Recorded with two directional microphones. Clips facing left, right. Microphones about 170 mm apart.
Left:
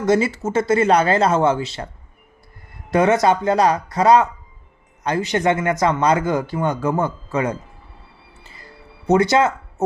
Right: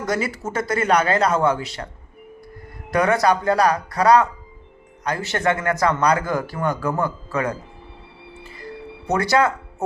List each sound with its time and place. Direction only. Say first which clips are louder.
0.0 s speech: left 6 dB; 25° left (ahead or behind)
2.9 s speech: left 2 dB; 25° left (ahead or behind)
8.4 s music: right 10 dB; 25° left (ahead or behind)